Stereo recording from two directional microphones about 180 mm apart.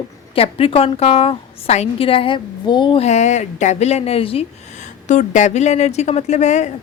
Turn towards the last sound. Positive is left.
turn(degrees=40)  # may be behind; listen again after turning